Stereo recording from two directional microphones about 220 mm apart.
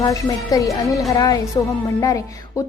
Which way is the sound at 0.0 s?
15° left (ahead or behind).